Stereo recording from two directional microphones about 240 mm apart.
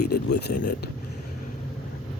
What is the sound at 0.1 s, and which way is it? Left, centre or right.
Speech, left.